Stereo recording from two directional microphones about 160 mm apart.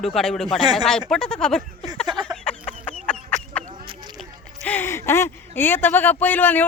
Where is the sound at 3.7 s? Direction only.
30° right (ahead or behind).